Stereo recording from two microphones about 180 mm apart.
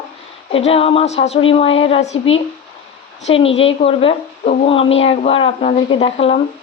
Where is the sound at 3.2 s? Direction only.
30° left (ahead or behind).